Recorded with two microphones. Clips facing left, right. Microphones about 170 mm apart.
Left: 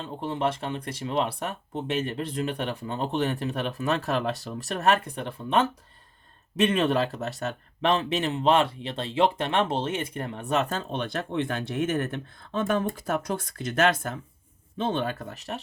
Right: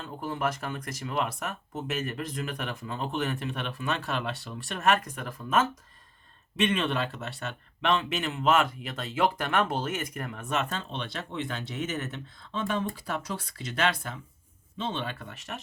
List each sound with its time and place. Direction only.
0.0 s speech: 25° left (ahead or behind)